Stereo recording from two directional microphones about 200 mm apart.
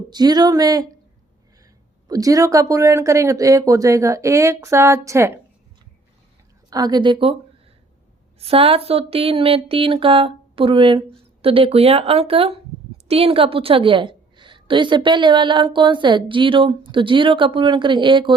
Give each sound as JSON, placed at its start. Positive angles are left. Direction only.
{"t": 0.1, "sound": "a woman's voice", "side_deg": -20}
{"t": 2.0, "sound": "speech", "side_deg": -15}
{"t": 6.7, "sound": "a woman's voice", "side_deg": -20}
{"t": 8.4, "sound": "a woman's voice", "side_deg": -30}